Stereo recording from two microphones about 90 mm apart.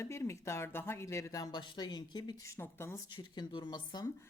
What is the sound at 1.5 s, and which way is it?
Speech, 55° left (ahead or behind).